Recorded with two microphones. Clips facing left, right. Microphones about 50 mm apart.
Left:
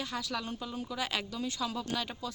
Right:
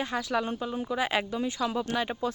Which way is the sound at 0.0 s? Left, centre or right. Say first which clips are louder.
Right 7 dB; right.